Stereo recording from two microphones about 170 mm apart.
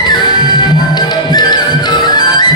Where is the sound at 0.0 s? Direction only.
25° left (ahead or behind).